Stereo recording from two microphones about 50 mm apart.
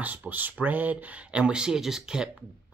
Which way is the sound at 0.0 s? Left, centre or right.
Right.